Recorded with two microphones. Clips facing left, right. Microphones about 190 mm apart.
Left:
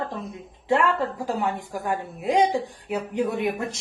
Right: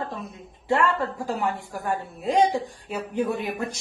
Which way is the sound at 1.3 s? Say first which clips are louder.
Left 1 dB; 20° left (ahead or behind).